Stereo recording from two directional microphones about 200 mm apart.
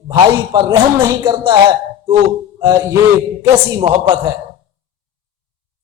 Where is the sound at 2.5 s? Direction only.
15° right (ahead or behind).